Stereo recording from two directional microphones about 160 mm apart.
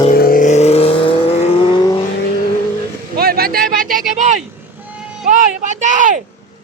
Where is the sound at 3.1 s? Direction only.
70° right (ahead or behind); by 4.4 s 55° right (ahead or behind).